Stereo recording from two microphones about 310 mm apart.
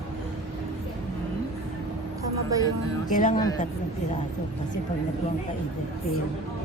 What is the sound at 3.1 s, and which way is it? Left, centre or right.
Speech, left.